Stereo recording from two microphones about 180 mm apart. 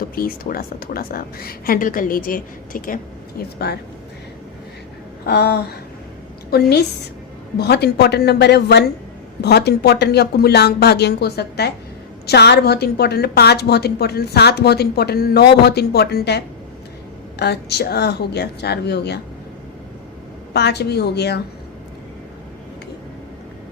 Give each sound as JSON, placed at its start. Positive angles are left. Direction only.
{"t": 0.2, "sound": "speech", "side_deg": 55}
{"t": 5.2, "sound": "a woman's voice", "side_deg": 65}
{"t": 17.4, "sound": "a woman's voice", "side_deg": 65}
{"t": 20.5, "sound": "a woman's voice", "side_deg": 65}